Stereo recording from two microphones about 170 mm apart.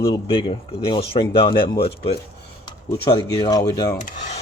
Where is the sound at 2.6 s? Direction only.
25° left (ahead or behind).